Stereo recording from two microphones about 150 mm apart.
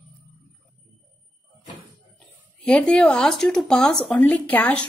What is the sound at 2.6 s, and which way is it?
Speech, 5° left (ahead or behind).